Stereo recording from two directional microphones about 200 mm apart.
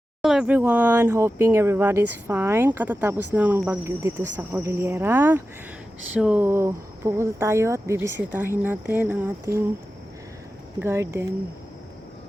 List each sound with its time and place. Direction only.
0.2 s speech: centre (ahead or behind)
10.8 s speech: 15° right (ahead or behind)